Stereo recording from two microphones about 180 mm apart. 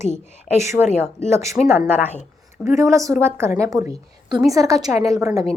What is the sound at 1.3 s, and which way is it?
A woman's voice, 15° right (ahead or behind).